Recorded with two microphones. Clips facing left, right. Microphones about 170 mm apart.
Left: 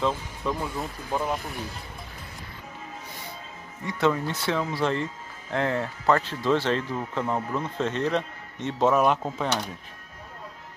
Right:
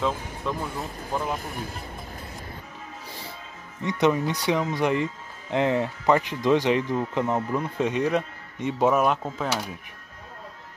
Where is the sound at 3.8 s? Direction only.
20° right (ahead or behind).